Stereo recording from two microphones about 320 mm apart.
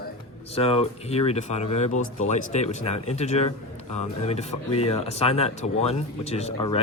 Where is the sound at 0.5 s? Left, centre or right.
Centre.